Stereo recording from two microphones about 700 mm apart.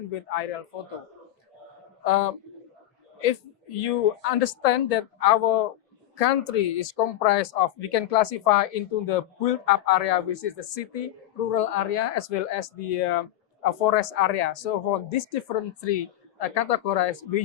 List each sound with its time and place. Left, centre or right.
0.1 s speech: left
2.0 s speech: left